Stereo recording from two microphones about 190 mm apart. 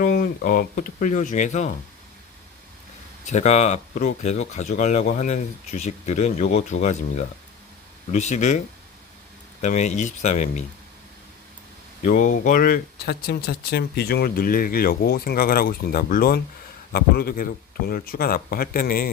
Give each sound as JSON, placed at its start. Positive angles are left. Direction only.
{"t": 0.0, "sound": "speech", "side_deg": 45}
{"t": 3.2, "sound": "speech", "side_deg": 40}
{"t": 12.0, "sound": "speech", "side_deg": 45}